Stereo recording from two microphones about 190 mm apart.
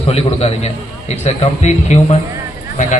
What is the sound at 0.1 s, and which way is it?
A man's voice, 30° left (ahead or behind).